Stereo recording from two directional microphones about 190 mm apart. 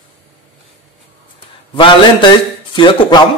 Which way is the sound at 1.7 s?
25° left (ahead or behind).